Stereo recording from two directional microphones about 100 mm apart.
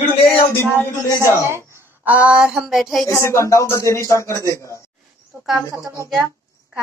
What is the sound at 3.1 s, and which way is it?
A man's voice, 30° left (ahead or behind).